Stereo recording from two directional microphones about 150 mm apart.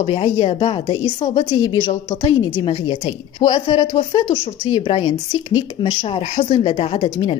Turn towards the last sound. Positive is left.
turn(degrees=35)  # may be behind; listen again after turning